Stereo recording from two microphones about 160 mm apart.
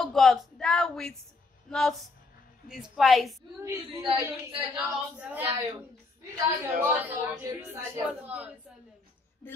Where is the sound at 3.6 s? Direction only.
20° right (ahead or behind).